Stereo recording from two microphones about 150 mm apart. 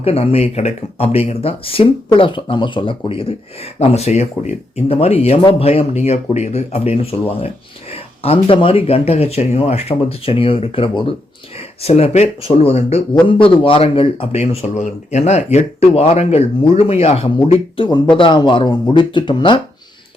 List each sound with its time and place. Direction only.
0.0 s a man's voice: 40° left (ahead or behind)